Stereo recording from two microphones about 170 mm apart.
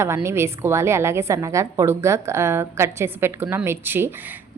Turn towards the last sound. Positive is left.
turn(degrees=-15)  # may be behind; listen again after turning